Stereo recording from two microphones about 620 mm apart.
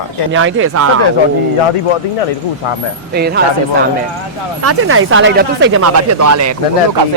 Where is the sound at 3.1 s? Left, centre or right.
Centre.